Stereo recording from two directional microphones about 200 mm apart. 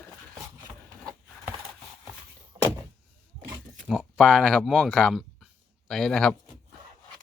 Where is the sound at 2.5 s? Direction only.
20° right (ahead or behind).